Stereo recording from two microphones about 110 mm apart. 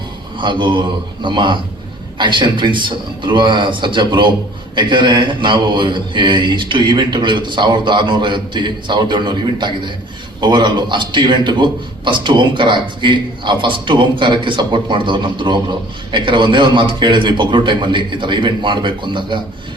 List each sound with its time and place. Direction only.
0.3 s a man's voice: 45° right (ahead or behind)